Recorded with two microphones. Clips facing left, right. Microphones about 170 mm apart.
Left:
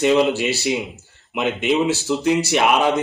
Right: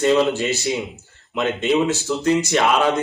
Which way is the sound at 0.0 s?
15° left (ahead or behind).